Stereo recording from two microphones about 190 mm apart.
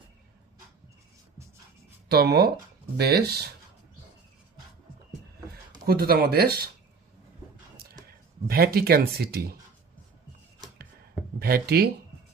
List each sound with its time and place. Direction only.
2.0 s speech: 55° right (ahead or behind)
5.8 s speech: 50° right (ahead or behind)
8.4 s speech: 50° right (ahead or behind)
11.3 s speech: 55° right (ahead or behind)